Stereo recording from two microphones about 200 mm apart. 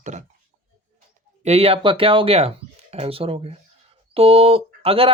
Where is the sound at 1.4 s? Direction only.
30° right (ahead or behind).